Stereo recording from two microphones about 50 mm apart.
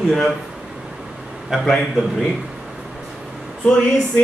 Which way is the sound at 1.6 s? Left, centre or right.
Centre.